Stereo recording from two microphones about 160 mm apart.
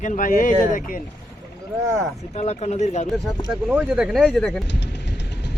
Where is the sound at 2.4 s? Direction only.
45° left (ahead or behind).